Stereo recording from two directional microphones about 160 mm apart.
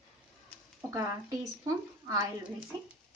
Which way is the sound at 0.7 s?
20° right (ahead or behind).